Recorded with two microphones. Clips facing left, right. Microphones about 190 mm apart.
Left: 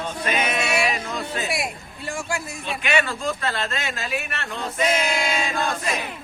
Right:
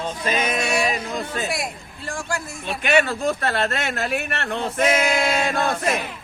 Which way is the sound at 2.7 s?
50° right (ahead or behind).